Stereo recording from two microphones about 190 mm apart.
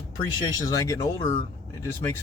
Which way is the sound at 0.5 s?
20° left (ahead or behind).